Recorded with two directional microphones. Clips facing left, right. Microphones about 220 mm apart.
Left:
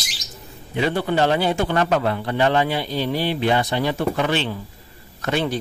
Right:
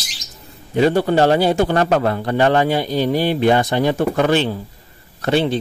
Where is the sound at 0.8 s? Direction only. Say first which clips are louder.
Right 6 dB; 40° right (ahead or behind).